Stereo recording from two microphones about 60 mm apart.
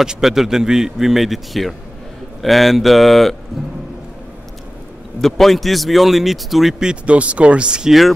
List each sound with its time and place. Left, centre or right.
0.0 s speech: centre
5.2 s speech: centre
6.8 s speech: centre